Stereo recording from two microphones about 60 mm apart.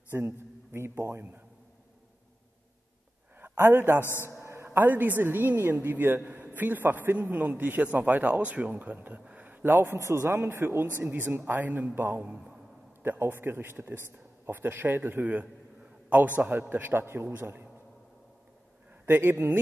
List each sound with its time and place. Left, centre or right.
0.1 s a woman's voice: right
3.3 s speech: right
4.0 s a man's voice: left
4.4 s a sound: right
4.7 s a woman's voice: right
9.2 s a sound: right
9.9 s speech: right
11.0 s a woman's voice: right
12.2 s a man's voice: centre
13.0 s a woman's voice: right
19.0 s a woman's voice: right